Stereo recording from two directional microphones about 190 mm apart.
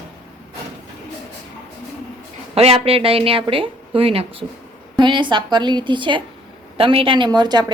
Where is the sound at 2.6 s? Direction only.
30° right (ahead or behind).